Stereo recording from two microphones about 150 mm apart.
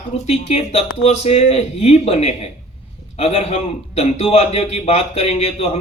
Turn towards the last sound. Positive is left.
turn(degrees=45)  # may be behind; listen again after turning